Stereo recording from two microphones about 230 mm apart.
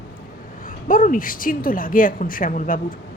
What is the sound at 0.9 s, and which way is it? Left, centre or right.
A woman's voice, left.